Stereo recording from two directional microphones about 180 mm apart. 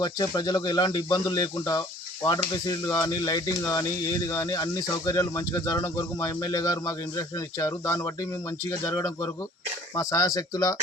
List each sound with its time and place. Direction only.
0.0 s speech: 20° left (ahead or behind)